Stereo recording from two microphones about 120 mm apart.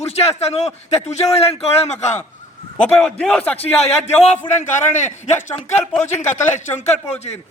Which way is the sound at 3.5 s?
60° left (ahead or behind).